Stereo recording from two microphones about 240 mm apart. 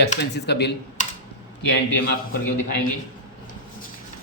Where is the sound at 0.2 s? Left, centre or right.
Left.